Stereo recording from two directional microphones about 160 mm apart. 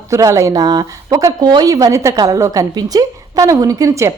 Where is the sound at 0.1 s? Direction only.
20° right (ahead or behind).